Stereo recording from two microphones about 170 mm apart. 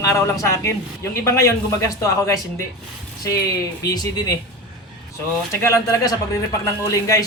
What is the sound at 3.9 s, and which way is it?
Speech, 25° left (ahead or behind).